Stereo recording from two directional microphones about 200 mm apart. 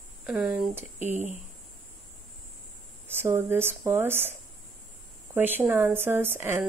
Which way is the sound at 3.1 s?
10° right (ahead or behind).